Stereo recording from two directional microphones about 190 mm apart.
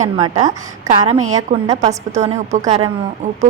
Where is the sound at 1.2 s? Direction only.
90° right.